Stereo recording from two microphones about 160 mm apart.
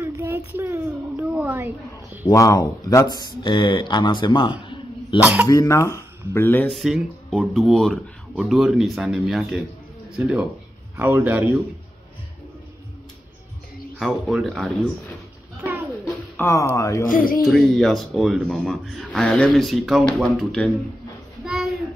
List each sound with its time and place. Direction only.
0.0 s a sound: 15° right (ahead or behind)
1.3 s a woman's voice: 10° right (ahead or behind)
2.2 s speech: 20° left (ahead or behind)
5.2 s a man's voice: 10° right (ahead or behind)
5.5 s speech: 20° left (ahead or behind)
6.7 s speech: centre (ahead or behind)
11.0 s a man's voice: 15° right (ahead or behind)
13.9 s speech: centre (ahead or behind)
15.6 s a sound: 5° right (ahead or behind)
16.3 s speech: 15° left (ahead or behind)
17.1 s music: 60° left (ahead or behind)
17.5 s speech: centre (ahead or behind)